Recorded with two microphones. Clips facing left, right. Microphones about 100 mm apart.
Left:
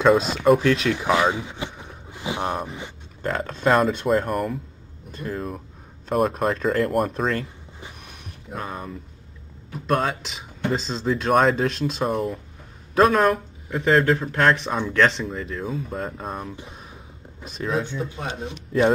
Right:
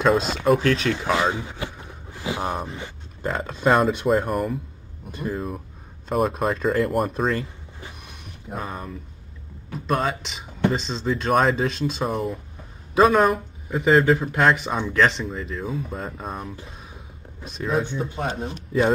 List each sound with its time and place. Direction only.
0.0 s speech: centre (ahead or behind)
0.9 s speech: 15° left (ahead or behind)
2.0 s vehicle: 20° left (ahead or behind)
2.4 s speech: centre (ahead or behind)
6.0 s speech: centre (ahead or behind)
8.5 s speech: centre (ahead or behind)
17.9 s speech: 35° right (ahead or behind)